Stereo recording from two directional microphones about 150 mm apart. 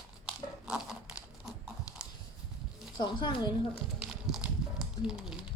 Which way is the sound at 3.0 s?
30° left (ahead or behind).